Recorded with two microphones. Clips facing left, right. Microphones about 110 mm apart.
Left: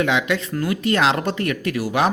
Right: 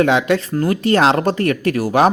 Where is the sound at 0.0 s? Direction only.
40° right (ahead or behind).